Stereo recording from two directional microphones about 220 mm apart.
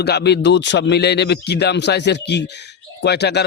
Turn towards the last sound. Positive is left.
turn(degrees=50)  # may be behind; listen again after turning